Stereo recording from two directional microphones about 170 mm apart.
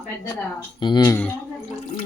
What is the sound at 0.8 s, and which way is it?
Speech, 25° left (ahead or behind).